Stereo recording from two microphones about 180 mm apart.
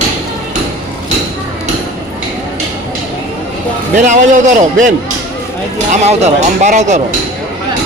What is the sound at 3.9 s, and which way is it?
Speech, 45° right (ahead or behind).